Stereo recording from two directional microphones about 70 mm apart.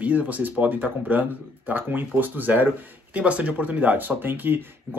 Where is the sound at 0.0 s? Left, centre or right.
Right.